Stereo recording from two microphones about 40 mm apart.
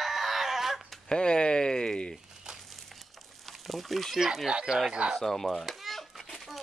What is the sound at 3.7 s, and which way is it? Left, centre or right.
Speech, centre.